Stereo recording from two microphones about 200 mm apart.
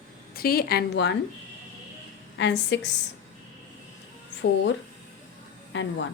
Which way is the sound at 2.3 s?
60° left (ahead or behind).